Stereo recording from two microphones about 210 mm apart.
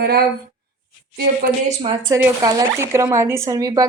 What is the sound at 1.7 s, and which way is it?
Speech, 25° right (ahead or behind).